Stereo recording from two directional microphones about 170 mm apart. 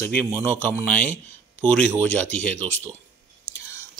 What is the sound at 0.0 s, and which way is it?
A man's voice, 10° left (ahead or behind).